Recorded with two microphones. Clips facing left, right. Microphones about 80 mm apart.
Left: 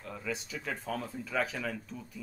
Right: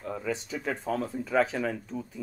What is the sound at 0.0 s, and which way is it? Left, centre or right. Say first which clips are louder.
Speech: right 6 dB; right.